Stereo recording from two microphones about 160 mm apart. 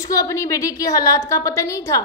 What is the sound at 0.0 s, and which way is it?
A woman's voice, 20° left (ahead or behind).